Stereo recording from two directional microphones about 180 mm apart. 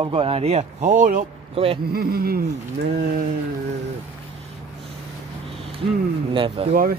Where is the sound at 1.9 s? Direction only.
55° right (ahead or behind).